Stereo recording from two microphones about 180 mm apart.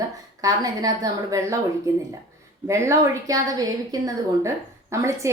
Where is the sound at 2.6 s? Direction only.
15° right (ahead or behind).